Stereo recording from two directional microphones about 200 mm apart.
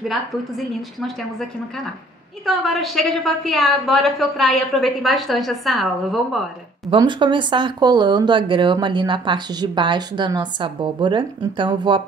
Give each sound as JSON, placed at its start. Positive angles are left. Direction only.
{"t": 2.4, "sound": "a woman's voice", "side_deg": 0}
{"t": 6.9, "sound": "speech", "side_deg": -25}